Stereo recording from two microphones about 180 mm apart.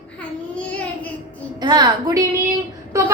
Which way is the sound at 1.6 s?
25° right (ahead or behind).